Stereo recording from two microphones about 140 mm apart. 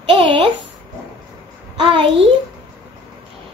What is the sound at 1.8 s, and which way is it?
Speech, 40° right (ahead or behind).